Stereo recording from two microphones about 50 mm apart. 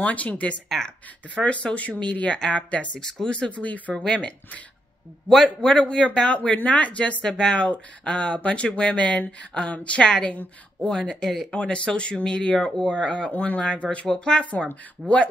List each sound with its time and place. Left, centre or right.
0.0 s speech: left
0.7 s speech: centre
1.3 s speech: left
3.9 s speech: centre
5.6 s speech: left